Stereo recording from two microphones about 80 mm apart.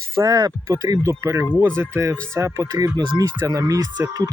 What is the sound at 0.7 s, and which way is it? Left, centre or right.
Speech, right.